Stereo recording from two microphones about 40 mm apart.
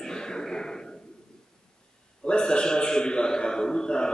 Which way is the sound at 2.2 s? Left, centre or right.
Left.